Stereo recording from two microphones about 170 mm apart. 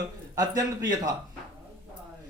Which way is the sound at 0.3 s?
20° right (ahead or behind).